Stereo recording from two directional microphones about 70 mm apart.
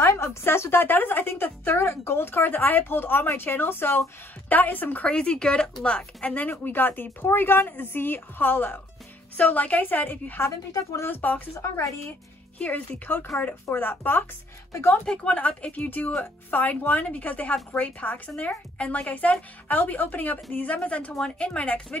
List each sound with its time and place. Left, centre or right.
0.0 s a woman's voice: left
5.0 s speech: centre
10.4 s speech: left
11.1 s speech: left
11.5 s speech: left
12.5 s a woman's voice: left